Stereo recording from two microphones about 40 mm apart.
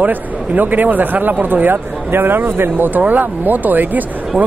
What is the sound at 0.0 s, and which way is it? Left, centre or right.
Speech, right.